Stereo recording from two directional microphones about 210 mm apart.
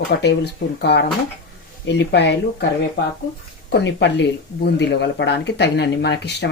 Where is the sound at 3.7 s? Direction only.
55° left (ahead or behind).